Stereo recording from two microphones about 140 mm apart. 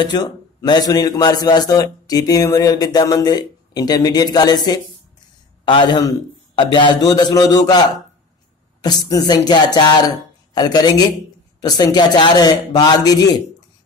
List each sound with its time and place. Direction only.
0.0 s a man's voice: 30° left (ahead or behind)
8.8 s a man's voice: 25° left (ahead or behind)